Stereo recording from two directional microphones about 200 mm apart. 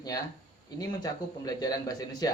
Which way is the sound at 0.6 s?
20° left (ahead or behind).